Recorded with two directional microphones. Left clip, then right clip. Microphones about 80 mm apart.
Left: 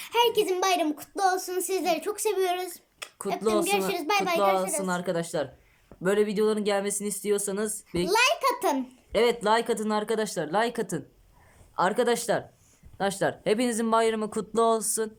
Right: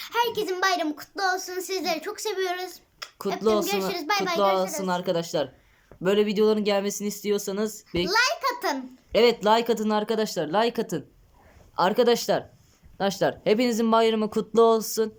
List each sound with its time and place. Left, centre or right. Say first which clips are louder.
0.0 s a child's voice: left 2 dB; left
4.8 s speech: right 3 dB; centre
8.1 s babbling: left 1 dB; left
9.1 s speech: right 3 dB; centre